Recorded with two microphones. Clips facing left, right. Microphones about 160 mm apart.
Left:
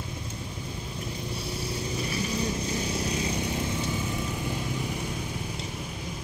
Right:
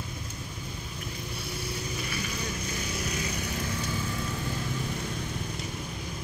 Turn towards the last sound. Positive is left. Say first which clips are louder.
# left 2 dB
turn(degrees=20)  # may be behind; listen again after turning